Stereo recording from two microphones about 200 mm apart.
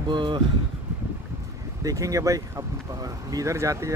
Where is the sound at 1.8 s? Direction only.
15° right (ahead or behind).